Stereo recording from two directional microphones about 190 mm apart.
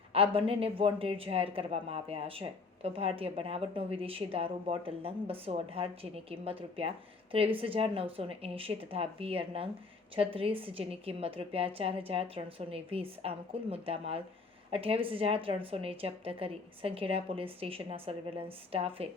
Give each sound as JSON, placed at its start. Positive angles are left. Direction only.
{"t": 0.1, "sound": "speech", "side_deg": -30}